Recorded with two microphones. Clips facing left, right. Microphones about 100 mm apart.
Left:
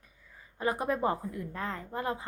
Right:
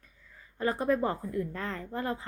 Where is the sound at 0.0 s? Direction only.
15° left (ahead or behind).